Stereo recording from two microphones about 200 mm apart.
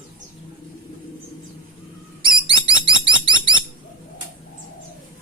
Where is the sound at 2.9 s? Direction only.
25° right (ahead or behind).